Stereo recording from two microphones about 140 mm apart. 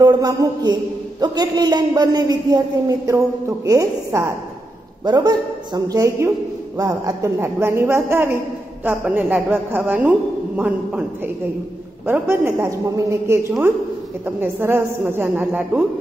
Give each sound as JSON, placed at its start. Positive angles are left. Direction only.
{"t": 0.0, "sound": "a man's voice", "side_deg": -30}
{"t": 12.1, "sound": "a man's voice", "side_deg": -15}